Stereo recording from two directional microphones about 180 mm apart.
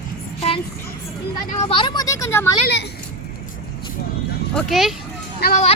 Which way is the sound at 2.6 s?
70° left (ahead or behind).